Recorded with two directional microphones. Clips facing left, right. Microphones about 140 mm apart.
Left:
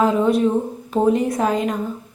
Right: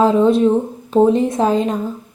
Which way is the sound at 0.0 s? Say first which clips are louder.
Right 4 dB; 30° right (ahead or behind).